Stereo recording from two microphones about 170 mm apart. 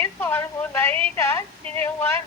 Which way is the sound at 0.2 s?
10° left (ahead or behind).